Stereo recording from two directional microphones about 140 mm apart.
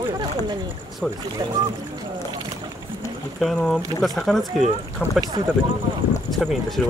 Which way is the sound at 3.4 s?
5° left (ahead or behind).